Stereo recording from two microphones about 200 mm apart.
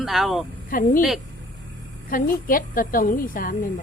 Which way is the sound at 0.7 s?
45° left (ahead or behind).